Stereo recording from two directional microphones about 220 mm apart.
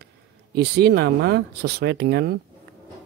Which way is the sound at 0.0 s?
50° right (ahead or behind).